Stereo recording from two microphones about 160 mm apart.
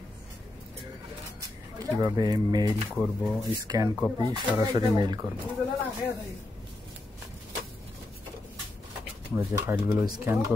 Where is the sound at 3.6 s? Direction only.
25° right (ahead or behind).